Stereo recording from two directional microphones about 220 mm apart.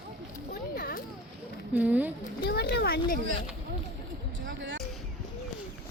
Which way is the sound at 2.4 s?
45° left (ahead or behind).